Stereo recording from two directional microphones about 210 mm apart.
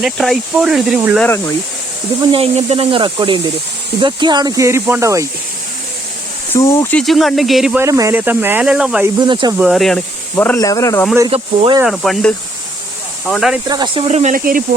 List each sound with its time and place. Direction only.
0.0 s speech: centre (ahead or behind)
1.2 s speech: 10° left (ahead or behind)
2.2 s speech: 25° right (ahead or behind)
6.5 s speech: 10° left (ahead or behind)
7.0 s speech: centre (ahead or behind)
7.9 s speech: 15° right (ahead or behind)
9.1 s speech: 20° right (ahead or behind)
9.6 s speech: centre (ahead or behind)
11.3 s speech: 25° right (ahead or behind)
11.8 s speech: centre (ahead or behind)
13.7 s speech: 20° right (ahead or behind); by 14.6 s 40° right (ahead or behind)